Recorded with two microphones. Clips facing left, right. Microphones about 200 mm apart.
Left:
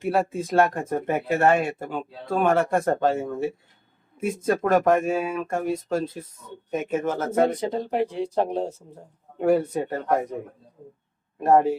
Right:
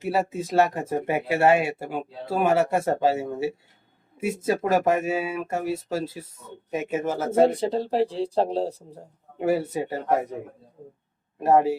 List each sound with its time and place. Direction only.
0.0 s speech: 5° right (ahead or behind)
7.3 s speech: 30° right (ahead or behind)
9.4 s speech: 5° right (ahead or behind)
11.4 s speech: 5° right (ahead or behind)